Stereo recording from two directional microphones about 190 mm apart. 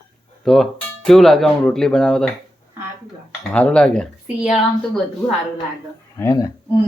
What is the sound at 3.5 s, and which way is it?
Speech, 5° left (ahead or behind).